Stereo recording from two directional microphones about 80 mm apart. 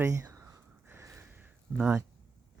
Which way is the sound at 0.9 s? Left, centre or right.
Right.